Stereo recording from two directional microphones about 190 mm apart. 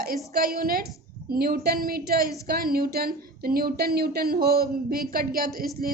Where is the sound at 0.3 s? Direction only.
50° right (ahead or behind).